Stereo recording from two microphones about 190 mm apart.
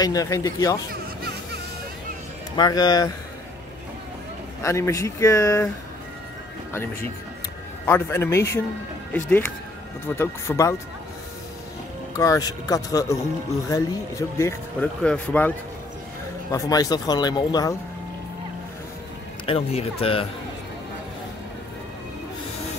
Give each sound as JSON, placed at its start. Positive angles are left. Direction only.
{"t": 0.0, "sound": "speech", "side_deg": 20}
{"t": 2.5, "sound": "speech", "side_deg": 20}
{"t": 4.6, "sound": "speech", "side_deg": 15}
{"t": 6.7, "sound": "speech", "side_deg": 15}
{"t": 12.2, "sound": "speech", "side_deg": 20}
{"t": 16.5, "sound": "speech", "side_deg": 20}
{"t": 19.4, "sound": "speech", "side_deg": 30}